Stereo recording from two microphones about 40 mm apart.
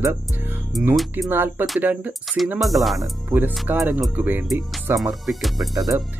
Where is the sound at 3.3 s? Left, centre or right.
Right.